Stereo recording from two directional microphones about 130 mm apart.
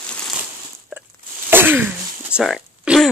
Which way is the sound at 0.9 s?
15° right (ahead or behind).